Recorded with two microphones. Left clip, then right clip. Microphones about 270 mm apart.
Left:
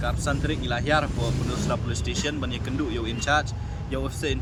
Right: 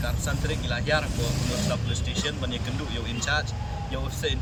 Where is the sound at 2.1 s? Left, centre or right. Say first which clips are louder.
Left 2 dB; centre.